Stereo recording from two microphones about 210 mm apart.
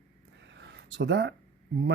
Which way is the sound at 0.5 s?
55° right (ahead or behind).